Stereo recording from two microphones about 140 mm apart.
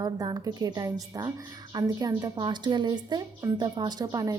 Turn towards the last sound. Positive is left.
turn(degrees=-30)  # may be behind; listen again after turning